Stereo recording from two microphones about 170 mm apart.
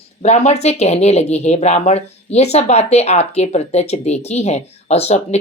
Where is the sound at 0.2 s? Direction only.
40° left (ahead or behind).